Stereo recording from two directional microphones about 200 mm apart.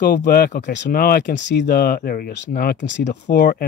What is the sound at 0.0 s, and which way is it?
Speech, 55° left (ahead or behind).